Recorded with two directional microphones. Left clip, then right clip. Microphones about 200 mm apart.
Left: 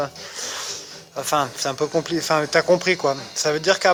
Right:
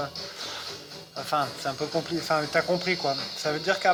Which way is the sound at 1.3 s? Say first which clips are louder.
Left 6 dB; 45° left (ahead or behind).